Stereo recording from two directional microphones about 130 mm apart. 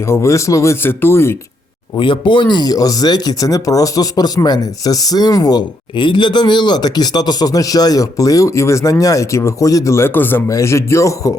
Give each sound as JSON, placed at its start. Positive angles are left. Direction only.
{"t": 0.1, "sound": "speech", "side_deg": 20}
{"t": 2.0, "sound": "speech", "side_deg": 40}